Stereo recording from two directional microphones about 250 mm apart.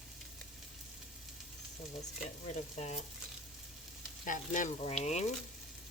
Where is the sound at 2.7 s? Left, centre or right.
Left.